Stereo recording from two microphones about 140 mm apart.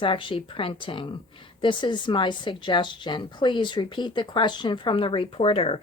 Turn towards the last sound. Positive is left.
turn(degrees=45)  # may be behind; listen again after turning